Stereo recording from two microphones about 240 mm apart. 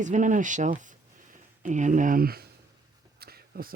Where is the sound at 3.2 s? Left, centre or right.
Right.